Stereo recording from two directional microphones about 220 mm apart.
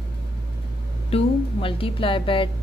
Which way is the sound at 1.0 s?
25° left (ahead or behind).